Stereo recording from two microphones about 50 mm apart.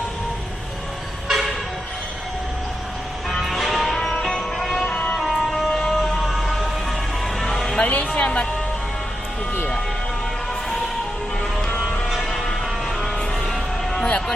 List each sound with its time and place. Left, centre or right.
1.3 s vehicle: centre
3.4 s music: centre
7.8 s music: left
12.2 s a sound: centre